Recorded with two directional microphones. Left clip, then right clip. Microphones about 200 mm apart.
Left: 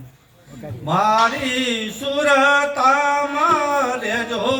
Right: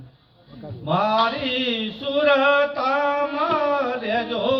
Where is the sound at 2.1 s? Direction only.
35° left (ahead or behind).